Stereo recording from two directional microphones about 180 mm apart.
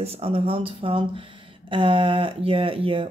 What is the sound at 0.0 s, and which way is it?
Speech, 35° right (ahead or behind).